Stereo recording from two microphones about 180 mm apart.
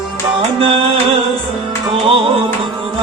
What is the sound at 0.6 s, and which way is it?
Music, 30° right (ahead or behind).